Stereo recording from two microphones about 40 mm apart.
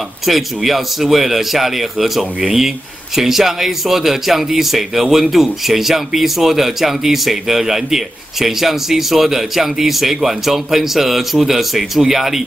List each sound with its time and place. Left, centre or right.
0.3 s a man's voice: centre